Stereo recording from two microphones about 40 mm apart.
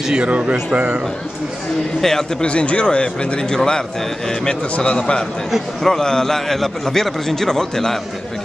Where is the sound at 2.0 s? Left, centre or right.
Centre.